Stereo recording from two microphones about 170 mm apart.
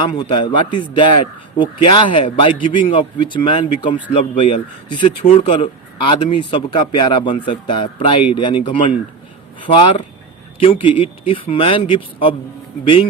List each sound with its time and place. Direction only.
0.0 s speech: 25° left (ahead or behind)